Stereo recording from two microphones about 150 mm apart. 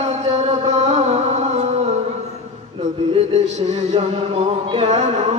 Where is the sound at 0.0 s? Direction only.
50° right (ahead or behind).